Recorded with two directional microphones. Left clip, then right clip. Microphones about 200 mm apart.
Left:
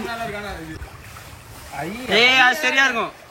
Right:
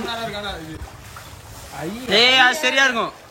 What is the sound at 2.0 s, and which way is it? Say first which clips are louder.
A man's voice: even; 10° right (ahead or behind).